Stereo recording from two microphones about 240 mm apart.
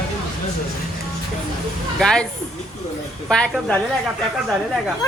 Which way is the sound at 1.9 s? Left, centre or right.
Centre.